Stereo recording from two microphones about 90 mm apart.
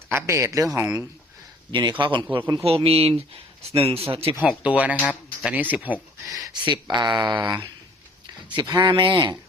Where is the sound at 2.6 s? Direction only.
90° right.